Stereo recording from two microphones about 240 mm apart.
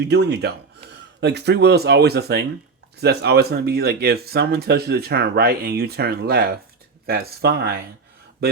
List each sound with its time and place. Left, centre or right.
0.0 s speech: right